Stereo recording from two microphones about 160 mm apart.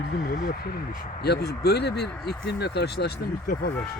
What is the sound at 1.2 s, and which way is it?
Speech, 90° left.